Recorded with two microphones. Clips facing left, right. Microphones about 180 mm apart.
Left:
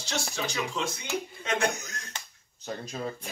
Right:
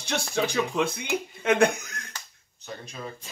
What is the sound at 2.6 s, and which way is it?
Speech, 35° left (ahead or behind).